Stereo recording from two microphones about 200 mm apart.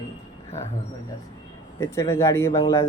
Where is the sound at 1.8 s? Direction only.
15° left (ahead or behind).